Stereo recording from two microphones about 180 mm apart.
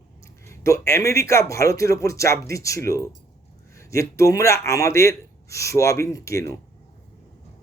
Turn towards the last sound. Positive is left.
turn(degrees=15)  # may be behind; listen again after turning